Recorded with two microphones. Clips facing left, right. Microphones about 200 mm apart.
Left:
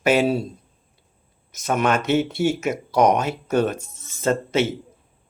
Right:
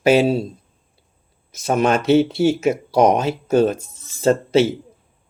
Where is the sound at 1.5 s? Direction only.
30° right (ahead or behind).